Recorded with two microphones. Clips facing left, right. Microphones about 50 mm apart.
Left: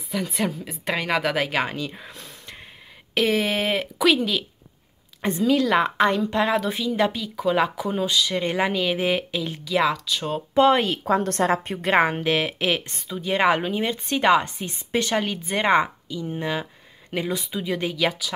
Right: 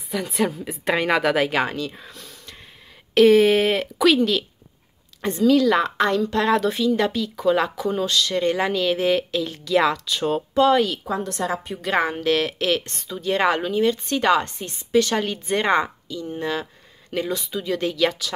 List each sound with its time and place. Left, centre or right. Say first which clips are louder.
0.1 s a woman's voice: right 2 dB; centre
3.2 s a woman's voice: right 8 dB; centre
5.2 s a woman's voice: right 3 dB; centre
9.8 s a woman's voice: right 2 dB; centre
10.5 s a woman's voice: left 1 dB; left
15.1 s a woman's voice: right 1 dB; centre